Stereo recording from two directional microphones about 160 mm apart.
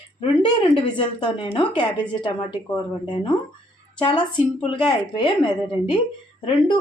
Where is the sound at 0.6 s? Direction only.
30° left (ahead or behind).